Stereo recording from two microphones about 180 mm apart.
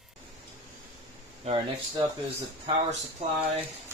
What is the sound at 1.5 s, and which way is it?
Speech, 35° right (ahead or behind).